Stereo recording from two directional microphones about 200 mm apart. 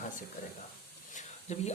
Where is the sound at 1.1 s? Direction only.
35° left (ahead or behind).